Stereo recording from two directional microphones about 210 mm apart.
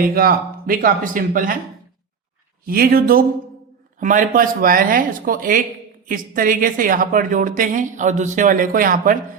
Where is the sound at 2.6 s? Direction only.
45° right (ahead or behind).